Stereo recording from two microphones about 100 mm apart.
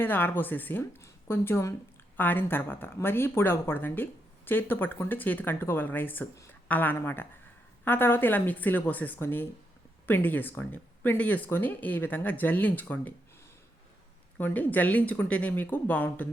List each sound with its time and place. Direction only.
0.0 s a woman's voice: 20° left (ahead or behind)
14.3 s speech: 15° left (ahead or behind)